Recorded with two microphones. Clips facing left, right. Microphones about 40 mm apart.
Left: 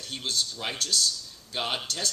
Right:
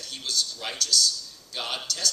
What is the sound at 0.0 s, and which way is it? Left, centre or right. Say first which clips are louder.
Speech: even; left.